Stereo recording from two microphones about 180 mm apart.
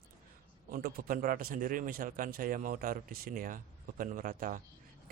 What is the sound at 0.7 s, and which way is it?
Speech, 55° right (ahead or behind).